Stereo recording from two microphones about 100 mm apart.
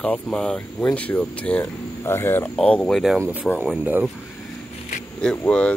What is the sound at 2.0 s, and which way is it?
Speech, 25° left (ahead or behind).